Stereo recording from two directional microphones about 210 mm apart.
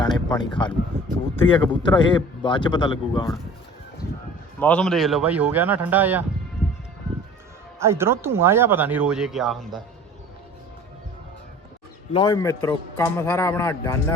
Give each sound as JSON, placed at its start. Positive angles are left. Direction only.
{"t": 0.0, "sound": "a sound", "side_deg": 20}
{"t": 1.5, "sound": "a man's voice", "side_deg": 25}
{"t": 4.6, "sound": "speech", "side_deg": 5}
{"t": 7.8, "sound": "speech", "side_deg": -10}
{"t": 12.1, "sound": "speech", "side_deg": 20}